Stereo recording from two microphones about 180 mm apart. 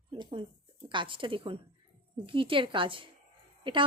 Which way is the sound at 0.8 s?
25° right (ahead or behind).